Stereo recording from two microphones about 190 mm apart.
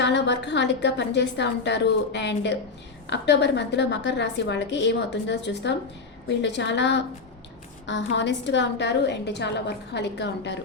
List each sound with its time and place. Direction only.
0.0 s a woman's voice: 65° left (ahead or behind)